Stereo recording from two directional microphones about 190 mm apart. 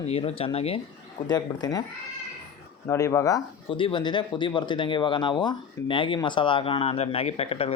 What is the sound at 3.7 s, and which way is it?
Speech, 25° left (ahead or behind).